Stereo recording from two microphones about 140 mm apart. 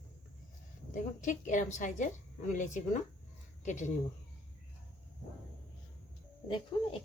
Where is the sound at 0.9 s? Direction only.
65° left (ahead or behind).